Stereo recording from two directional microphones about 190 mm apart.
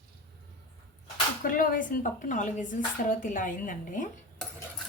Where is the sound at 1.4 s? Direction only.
45° left (ahead or behind).